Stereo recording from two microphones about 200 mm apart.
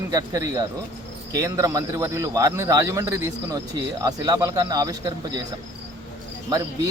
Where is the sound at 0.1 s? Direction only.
15° right (ahead or behind).